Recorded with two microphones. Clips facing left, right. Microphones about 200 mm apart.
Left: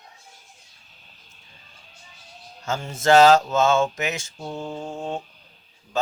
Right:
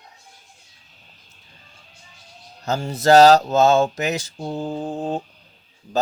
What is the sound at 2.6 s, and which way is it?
Speech, 35° right (ahead or behind).